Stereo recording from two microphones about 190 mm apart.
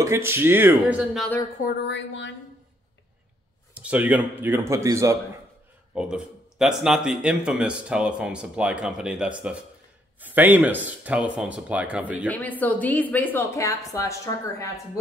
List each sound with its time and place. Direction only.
0.0 s speech: 15° right (ahead or behind)
1.6 s a sound: 65° left (ahead or behind)
3.7 s speech: 5° right (ahead or behind)
5.9 s speech: 5° right (ahead or behind)
12.3 s speech: 10° left (ahead or behind)